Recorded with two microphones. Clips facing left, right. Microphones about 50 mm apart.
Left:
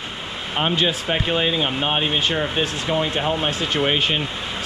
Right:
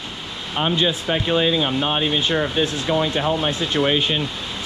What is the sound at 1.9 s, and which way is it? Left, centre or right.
Speech, left.